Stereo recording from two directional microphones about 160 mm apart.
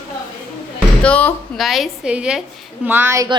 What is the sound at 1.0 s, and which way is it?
Speech, 10° left (ahead or behind).